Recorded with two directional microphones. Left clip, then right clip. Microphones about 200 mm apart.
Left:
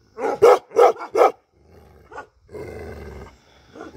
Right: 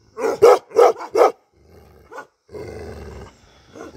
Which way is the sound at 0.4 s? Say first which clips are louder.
Right 1 dB; centre (ahead or behind).